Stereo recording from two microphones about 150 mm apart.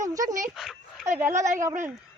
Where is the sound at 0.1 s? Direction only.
20° right (ahead or behind).